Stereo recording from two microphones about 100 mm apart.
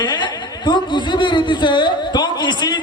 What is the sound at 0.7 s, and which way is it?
A man's voice, 50° left (ahead or behind).